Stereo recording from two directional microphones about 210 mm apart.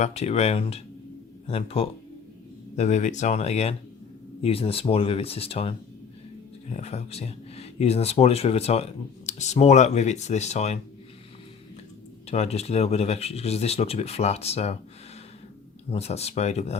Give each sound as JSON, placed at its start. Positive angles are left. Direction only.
{"t": 0.0, "sound": "speech", "side_deg": 30}
{"t": 12.3, "sound": "speech", "side_deg": 30}
{"t": 15.9, "sound": "speech", "side_deg": 30}